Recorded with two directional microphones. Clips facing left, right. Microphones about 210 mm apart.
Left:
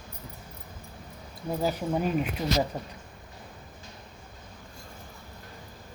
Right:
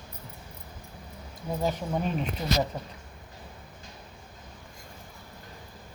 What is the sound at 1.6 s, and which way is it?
Speech, 5° left (ahead or behind).